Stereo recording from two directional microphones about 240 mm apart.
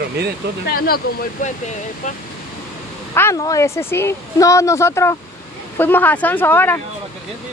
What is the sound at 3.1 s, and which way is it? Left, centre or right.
Speech, centre.